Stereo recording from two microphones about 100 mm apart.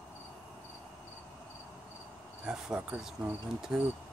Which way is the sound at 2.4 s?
10° right (ahead or behind).